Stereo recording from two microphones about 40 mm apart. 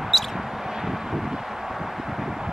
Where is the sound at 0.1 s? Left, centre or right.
Centre.